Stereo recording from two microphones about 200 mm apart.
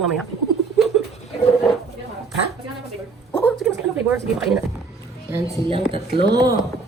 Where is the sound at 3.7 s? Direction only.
10° right (ahead or behind).